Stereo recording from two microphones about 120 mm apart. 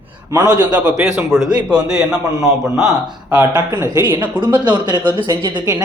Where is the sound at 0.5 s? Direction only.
10° right (ahead or behind).